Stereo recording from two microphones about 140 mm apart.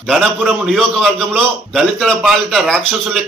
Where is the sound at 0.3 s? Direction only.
5° right (ahead or behind).